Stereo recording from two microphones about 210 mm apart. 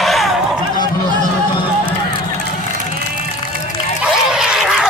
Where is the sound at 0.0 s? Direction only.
Centre (ahead or behind).